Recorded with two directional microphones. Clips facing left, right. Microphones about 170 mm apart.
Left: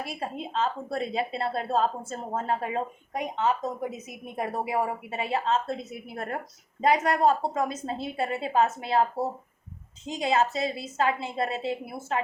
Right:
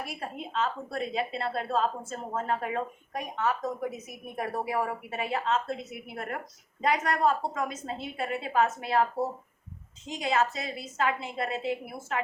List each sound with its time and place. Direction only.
0.1 s a woman's voice: 30° left (ahead or behind)
10.1 s a woman's voice: 30° left (ahead or behind)